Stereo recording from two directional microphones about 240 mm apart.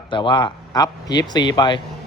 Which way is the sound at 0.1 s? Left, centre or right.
Centre.